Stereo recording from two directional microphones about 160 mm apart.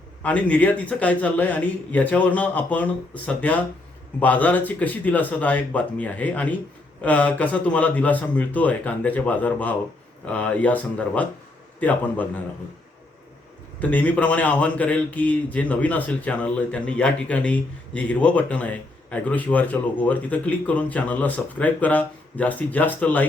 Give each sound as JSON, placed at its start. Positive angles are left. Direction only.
{"t": 0.2, "sound": "a man's voice", "side_deg": 10}
{"t": 13.7, "sound": "a man's voice", "side_deg": 10}